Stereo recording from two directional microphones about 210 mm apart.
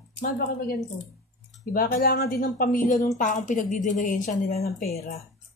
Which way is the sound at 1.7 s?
45° left (ahead or behind).